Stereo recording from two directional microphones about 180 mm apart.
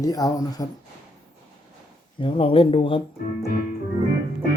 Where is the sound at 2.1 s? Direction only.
30° left (ahead or behind).